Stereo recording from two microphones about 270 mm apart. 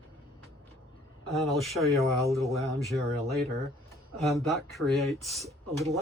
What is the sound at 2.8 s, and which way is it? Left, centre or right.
Speech, centre.